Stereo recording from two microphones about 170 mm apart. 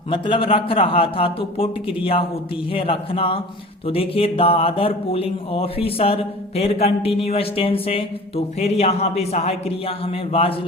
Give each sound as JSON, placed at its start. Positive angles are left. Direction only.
{"t": 0.1, "sound": "speech", "side_deg": 30}